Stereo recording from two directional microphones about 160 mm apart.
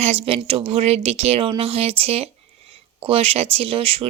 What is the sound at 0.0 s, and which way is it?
Speech, 40° right (ahead or behind).